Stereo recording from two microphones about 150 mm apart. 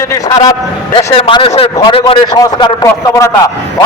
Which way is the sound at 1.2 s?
35° left (ahead or behind).